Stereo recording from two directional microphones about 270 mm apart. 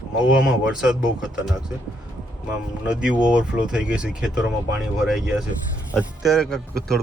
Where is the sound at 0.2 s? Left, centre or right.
Centre.